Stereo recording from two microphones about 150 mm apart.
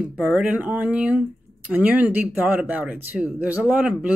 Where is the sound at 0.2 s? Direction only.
10° right (ahead or behind).